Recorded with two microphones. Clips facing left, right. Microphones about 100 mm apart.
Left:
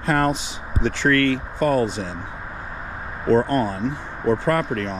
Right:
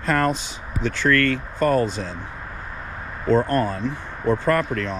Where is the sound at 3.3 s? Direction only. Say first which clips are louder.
Left 1 dB; 50° right (ahead or behind).